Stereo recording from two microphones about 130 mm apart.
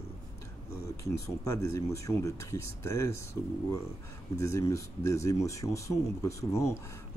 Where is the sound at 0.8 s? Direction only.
25° left (ahead or behind).